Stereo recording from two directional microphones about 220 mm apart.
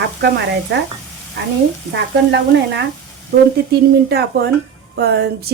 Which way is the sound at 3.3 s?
50° right (ahead or behind).